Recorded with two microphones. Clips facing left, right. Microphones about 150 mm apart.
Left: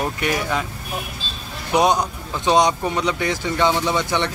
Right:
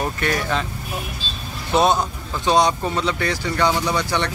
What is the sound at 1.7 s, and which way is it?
Speech, 15° left (ahead or behind).